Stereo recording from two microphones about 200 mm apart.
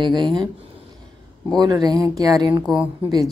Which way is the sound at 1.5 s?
20° right (ahead or behind).